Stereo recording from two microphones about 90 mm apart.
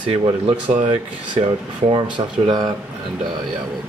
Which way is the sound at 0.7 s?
65° right (ahead or behind).